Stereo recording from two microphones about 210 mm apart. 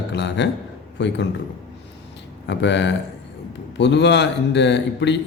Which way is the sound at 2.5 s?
55° left (ahead or behind).